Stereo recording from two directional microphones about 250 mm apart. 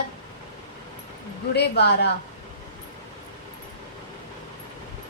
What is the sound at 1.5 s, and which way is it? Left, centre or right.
Speech, left.